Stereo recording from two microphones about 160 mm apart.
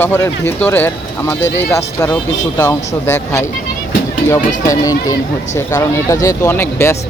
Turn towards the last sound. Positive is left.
turn(degrees=15)  # may be behind; listen again after turning